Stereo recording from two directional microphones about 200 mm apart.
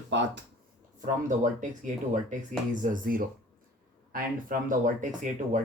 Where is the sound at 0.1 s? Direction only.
65° right (ahead or behind).